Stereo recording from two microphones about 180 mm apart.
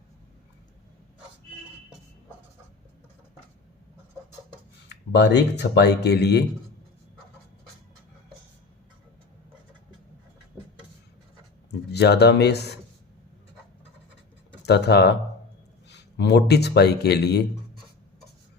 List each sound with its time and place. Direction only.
4.9 s speech: 70° left (ahead or behind)
11.9 s speech: 65° left (ahead or behind)
14.6 s speech: 65° left (ahead or behind)